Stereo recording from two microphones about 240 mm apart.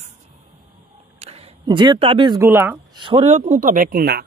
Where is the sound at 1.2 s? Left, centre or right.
Right.